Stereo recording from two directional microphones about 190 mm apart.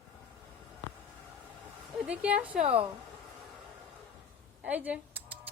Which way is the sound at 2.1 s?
5° right (ahead or behind).